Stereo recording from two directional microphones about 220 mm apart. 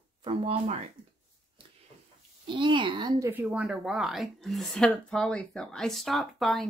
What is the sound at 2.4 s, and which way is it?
Speech, 20° right (ahead or behind).